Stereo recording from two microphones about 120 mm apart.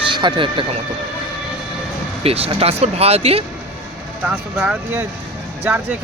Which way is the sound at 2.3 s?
55° right (ahead or behind).